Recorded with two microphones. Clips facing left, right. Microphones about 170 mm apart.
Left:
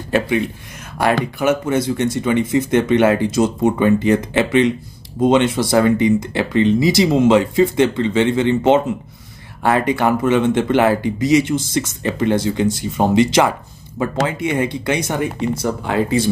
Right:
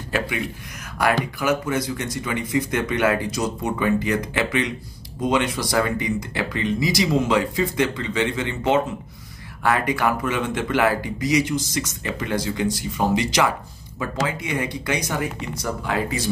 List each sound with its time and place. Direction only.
0.1 s speech: 25° left (ahead or behind)